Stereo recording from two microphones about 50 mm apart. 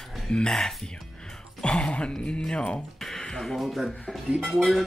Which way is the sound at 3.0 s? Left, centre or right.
Centre.